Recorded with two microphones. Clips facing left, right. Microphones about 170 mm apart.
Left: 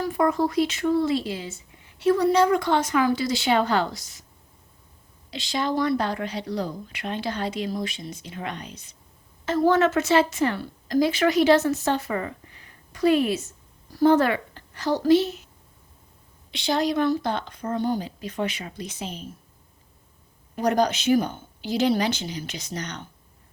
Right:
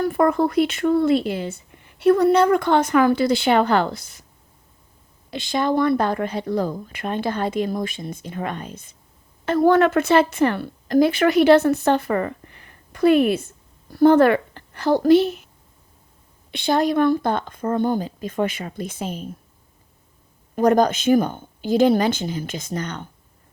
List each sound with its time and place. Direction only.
0.0 s speech: 55° right (ahead or behind)
5.3 s a woman's voice: 55° right (ahead or behind)
16.5 s speech: 55° right (ahead or behind)
20.6 s speech: 50° right (ahead or behind)